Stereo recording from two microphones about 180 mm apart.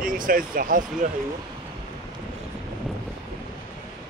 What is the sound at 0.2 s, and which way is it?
Speech, 50° right (ahead or behind).